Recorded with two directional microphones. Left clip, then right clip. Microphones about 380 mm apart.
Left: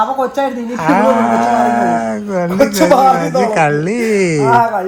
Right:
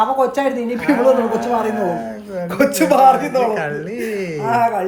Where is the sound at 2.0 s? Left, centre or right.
Left.